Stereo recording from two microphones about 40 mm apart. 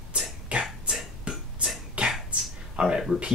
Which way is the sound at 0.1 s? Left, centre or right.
Right.